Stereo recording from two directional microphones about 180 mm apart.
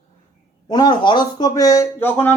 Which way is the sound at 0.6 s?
20° left (ahead or behind).